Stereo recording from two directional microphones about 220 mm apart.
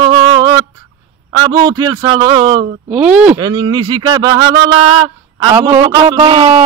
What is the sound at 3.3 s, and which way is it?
Speech, 20° right (ahead or behind).